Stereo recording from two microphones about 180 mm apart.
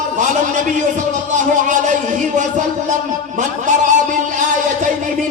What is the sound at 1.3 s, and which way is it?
Speech, 45° right (ahead or behind).